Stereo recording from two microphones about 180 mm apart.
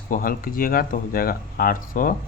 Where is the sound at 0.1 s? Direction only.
50° left (ahead or behind).